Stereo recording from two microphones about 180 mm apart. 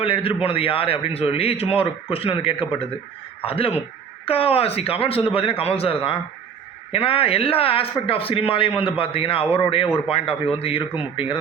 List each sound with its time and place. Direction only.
0.0 s a man's voice: 30° left (ahead or behind)